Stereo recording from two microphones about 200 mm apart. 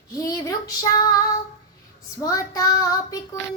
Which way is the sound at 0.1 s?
15° left (ahead or behind).